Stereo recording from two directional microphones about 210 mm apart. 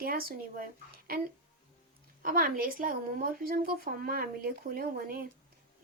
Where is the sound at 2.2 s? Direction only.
40° right (ahead or behind).